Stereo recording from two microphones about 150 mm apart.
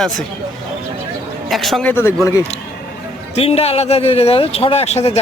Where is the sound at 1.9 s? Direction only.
15° left (ahead or behind).